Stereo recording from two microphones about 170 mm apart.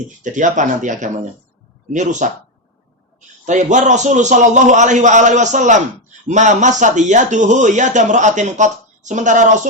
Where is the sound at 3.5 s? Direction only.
45° right (ahead or behind).